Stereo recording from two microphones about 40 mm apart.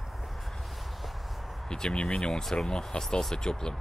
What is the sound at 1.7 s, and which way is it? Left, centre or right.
Speech, left.